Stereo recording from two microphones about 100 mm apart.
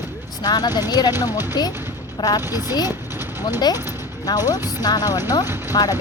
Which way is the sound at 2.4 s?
25° right (ahead or behind).